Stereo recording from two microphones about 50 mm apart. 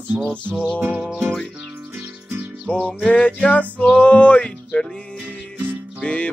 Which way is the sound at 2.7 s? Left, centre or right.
Left.